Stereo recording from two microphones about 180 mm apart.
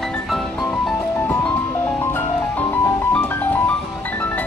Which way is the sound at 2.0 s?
10° left (ahead or behind).